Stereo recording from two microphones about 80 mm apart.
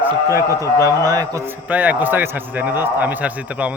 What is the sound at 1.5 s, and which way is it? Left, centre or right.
Speech, right.